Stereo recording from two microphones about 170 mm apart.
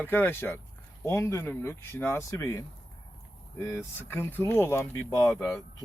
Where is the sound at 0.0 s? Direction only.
10° left (ahead or behind).